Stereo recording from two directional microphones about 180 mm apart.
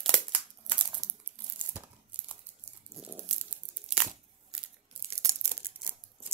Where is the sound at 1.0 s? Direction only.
20° right (ahead or behind).